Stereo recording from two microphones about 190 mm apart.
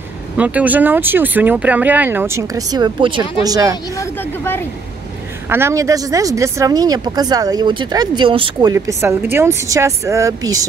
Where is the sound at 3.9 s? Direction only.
15° left (ahead or behind).